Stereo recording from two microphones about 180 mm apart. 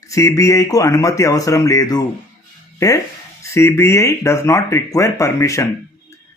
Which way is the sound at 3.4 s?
15° left (ahead or behind).